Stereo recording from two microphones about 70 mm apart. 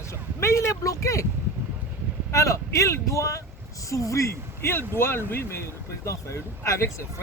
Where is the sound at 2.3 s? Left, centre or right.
Left.